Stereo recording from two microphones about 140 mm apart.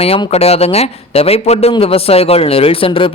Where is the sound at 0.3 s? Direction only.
45° left (ahead or behind).